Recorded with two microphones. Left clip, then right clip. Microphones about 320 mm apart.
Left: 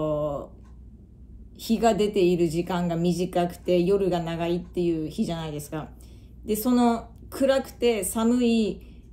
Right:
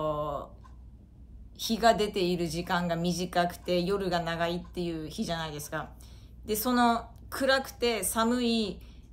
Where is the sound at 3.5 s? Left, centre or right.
Right.